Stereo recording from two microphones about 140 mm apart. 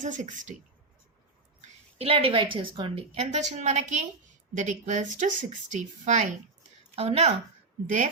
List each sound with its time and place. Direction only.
0.0 s speech: 60° right (ahead or behind)
2.0 s a woman's voice: 45° right (ahead or behind); by 6.3 s 60° right (ahead or behind)
6.9 s a woman's voice: 45° right (ahead or behind)